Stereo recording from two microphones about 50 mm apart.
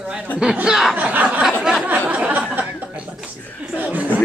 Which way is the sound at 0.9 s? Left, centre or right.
Right.